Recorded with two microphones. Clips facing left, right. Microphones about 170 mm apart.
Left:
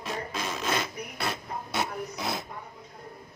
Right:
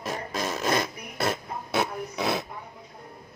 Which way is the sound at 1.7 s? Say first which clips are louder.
Right 5 dB; 65° right (ahead or behind).